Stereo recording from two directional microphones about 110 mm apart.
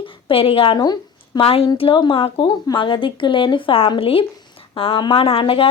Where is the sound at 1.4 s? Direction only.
65° left (ahead or behind).